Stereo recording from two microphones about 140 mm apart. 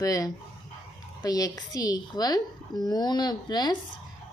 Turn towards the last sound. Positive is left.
turn(degrees=30)  # may be behind; listen again after turning